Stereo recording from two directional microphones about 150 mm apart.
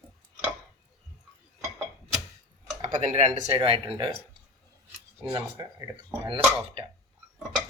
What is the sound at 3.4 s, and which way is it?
Speech, 40° right (ahead or behind).